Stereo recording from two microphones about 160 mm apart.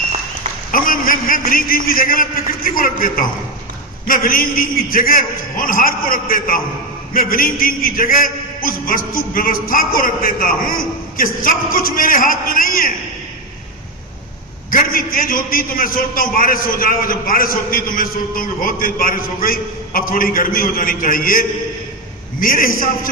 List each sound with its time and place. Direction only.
0.7 s a man's voice: 60° left (ahead or behind)
14.7 s a man's voice: 60° left (ahead or behind)